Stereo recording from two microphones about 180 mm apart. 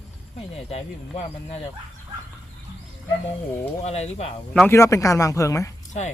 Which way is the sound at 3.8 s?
35° left (ahead or behind).